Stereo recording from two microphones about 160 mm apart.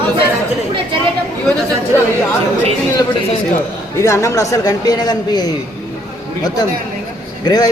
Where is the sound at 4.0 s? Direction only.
15° left (ahead or behind).